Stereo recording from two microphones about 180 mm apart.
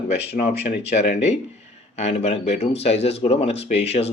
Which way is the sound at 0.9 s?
35° left (ahead or behind).